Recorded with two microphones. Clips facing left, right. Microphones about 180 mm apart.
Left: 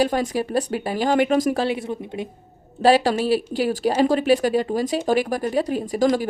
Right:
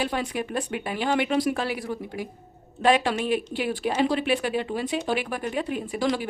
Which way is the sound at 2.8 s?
35° left (ahead or behind).